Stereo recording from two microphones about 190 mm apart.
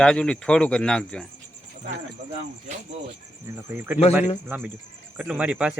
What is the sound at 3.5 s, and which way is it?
Speech, 10° right (ahead or behind).